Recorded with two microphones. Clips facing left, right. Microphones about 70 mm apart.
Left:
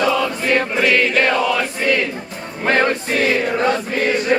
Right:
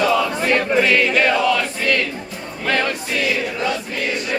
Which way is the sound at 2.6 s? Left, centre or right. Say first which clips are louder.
Left 4 dB; left.